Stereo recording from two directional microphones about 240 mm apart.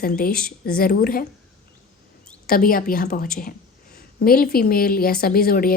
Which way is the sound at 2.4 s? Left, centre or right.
Left.